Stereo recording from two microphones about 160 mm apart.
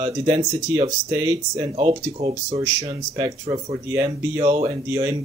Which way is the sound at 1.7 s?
40° right (ahead or behind).